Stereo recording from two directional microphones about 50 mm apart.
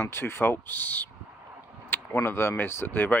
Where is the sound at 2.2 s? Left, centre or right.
Left.